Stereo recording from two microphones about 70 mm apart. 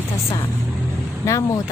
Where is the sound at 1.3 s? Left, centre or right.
Left.